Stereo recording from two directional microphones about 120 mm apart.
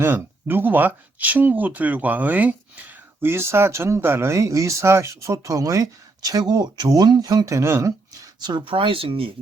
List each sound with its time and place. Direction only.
0.0 s speech: 20° right (ahead or behind)
8.4 s speech: 40° right (ahead or behind)